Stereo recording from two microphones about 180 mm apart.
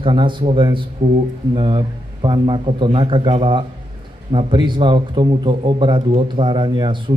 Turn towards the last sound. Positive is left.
turn(degrees=-25)  # may be behind; listen again after turning